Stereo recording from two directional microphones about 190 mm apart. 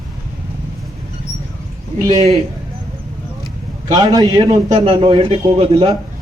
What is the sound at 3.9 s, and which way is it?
A man's voice, 20° right (ahead or behind).